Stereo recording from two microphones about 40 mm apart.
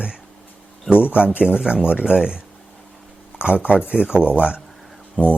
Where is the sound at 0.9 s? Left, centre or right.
Left.